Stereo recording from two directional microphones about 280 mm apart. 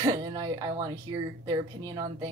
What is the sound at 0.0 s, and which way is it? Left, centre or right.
Speech, centre.